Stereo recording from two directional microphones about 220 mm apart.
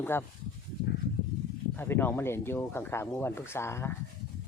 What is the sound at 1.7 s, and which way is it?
Speech, 10° left (ahead or behind).